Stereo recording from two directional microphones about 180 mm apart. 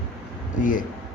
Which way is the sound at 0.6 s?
50° left (ahead or behind).